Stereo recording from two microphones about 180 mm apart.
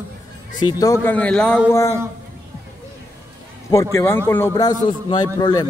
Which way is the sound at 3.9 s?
15° left (ahead or behind).